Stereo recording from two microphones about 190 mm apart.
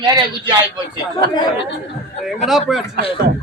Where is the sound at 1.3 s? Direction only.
25° left (ahead or behind).